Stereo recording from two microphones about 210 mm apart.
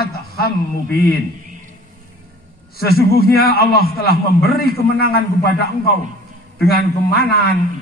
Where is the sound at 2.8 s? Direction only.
45° left (ahead or behind).